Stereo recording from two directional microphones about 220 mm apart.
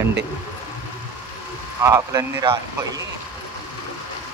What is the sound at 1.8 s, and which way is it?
Speech, 15° right (ahead or behind).